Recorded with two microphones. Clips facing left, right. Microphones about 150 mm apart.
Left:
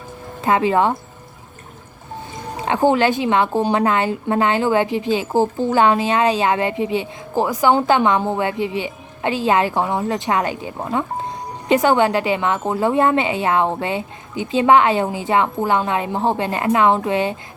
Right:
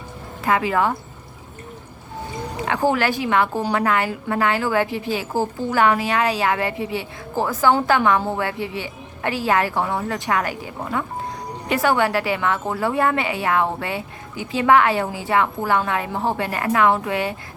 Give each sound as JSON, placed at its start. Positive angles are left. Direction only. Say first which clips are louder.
{"t": 0.4, "sound": "a woman's voice", "louder": "left 3 dB", "side_deg": 25}
{"t": 2.6, "sound": "a woman's voice", "louder": "left 4 dB", "side_deg": 20}